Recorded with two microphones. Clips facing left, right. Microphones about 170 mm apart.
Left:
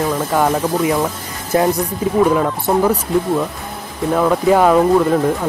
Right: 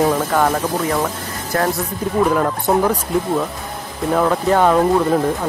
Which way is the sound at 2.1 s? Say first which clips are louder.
Left 2 dB; centre (ahead or behind).